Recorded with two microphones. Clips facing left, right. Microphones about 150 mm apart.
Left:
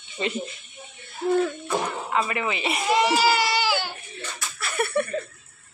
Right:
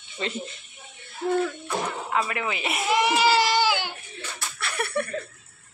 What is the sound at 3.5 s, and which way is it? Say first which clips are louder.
Baby cry: right 1 dB; 15° right (ahead or behind).